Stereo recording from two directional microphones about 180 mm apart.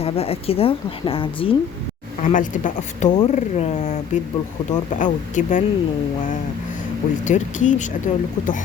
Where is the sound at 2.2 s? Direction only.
45° left (ahead or behind).